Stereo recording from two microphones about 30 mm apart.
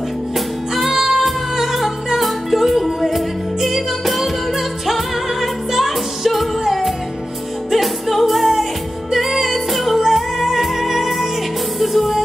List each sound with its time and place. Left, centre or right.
0.7 s music: centre